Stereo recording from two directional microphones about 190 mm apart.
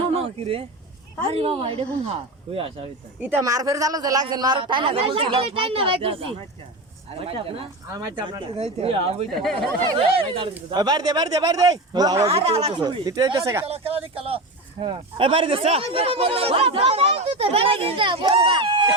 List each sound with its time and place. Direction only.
0.1 s a sound: 30° right (ahead or behind)
1.3 s speech: 30° right (ahead or behind)
3.2 s speech: 10° right (ahead or behind); by 7.7 s 30° right (ahead or behind)
7.9 s speech: 20° right (ahead or behind)
9.3 s speech: centre (ahead or behind)
10.2 s speech: 30° right (ahead or behind)
12.3 s speech: 30° right (ahead or behind)
12.8 s speech: 20° right (ahead or behind)
13.7 s speech: 30° right (ahead or behind)